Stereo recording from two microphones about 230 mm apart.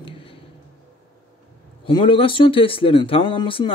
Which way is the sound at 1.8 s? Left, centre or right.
Left.